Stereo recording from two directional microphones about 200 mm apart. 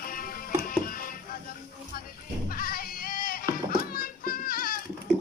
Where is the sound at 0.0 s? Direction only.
45° left (ahead or behind).